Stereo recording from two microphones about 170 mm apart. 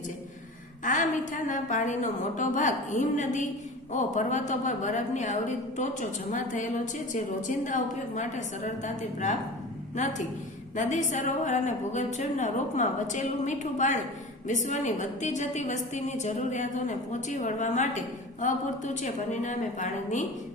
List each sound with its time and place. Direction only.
0.9 s a woman's voice: 50° left (ahead or behind)